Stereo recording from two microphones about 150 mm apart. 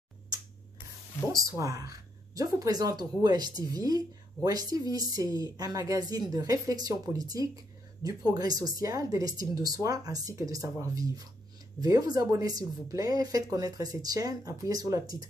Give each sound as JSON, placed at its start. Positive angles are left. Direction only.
{"t": 1.6, "sound": "a woman's voice", "side_deg": -25}